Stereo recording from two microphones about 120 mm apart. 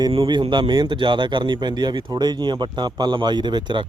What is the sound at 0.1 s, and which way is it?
Speech, 45° right (ahead or behind).